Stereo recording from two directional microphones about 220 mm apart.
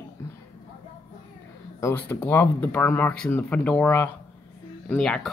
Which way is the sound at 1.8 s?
10° left (ahead or behind).